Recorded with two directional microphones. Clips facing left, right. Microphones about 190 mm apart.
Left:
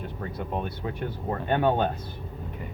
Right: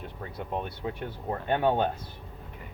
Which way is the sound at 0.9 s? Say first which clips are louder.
Left 2 dB; 20° right (ahead or behind).